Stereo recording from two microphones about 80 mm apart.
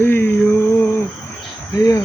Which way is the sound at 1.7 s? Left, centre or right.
Left.